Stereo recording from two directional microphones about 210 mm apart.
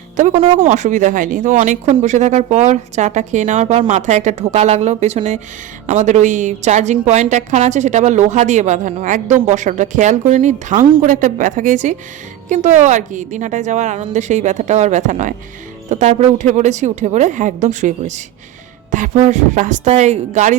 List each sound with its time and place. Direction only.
0.2 s speech: 35° right (ahead or behind)